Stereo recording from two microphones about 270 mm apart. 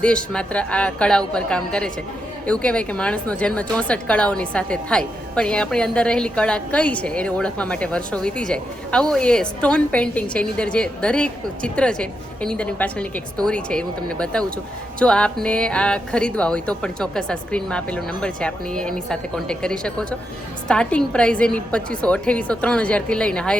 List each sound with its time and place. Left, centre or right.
0.0 s a woman's voice: centre